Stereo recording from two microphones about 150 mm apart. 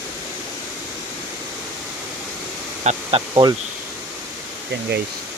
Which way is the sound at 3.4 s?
30° right (ahead or behind).